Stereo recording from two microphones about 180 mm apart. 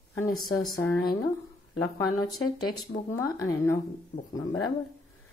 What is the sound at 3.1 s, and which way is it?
Speech, 15° left (ahead or behind).